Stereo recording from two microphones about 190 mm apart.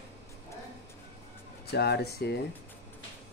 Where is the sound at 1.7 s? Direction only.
60° left (ahead or behind).